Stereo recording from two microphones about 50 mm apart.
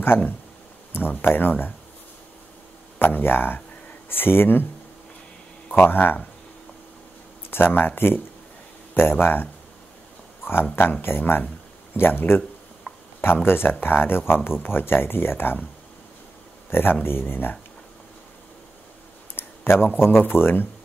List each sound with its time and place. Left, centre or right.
0.9 s speech: left
3.0 s speech: left
5.8 s speech: left
7.5 s speech: left
11.4 s a sound: left
13.5 s speech: left
16.7 s speech: left
19.3 s a sound: left
20.0 s speech: left